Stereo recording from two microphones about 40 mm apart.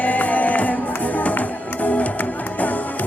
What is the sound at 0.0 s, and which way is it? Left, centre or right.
Music, left.